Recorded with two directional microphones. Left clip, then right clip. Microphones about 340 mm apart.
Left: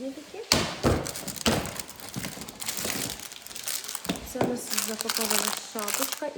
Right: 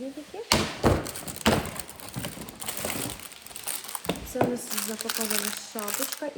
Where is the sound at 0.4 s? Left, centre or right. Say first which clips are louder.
Right 1 dB; right.